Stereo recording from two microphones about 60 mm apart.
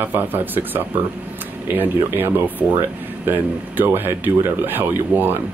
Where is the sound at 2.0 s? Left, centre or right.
Right.